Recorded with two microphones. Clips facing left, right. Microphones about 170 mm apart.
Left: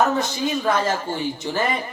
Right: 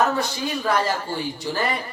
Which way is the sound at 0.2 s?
20° left (ahead or behind).